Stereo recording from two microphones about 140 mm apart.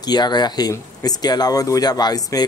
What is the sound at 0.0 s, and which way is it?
Speech, 30° left (ahead or behind).